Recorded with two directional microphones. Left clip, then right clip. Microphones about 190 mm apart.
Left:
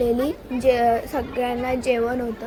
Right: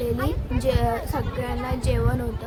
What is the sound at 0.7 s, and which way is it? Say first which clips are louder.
A woman's voice: left 6 dB; 10° left (ahead or behind).